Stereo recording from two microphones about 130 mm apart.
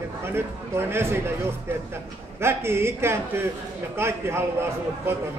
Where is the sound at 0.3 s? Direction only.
20° right (ahead or behind).